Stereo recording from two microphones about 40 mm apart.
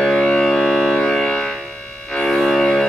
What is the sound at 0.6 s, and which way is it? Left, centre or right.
Organ, centre.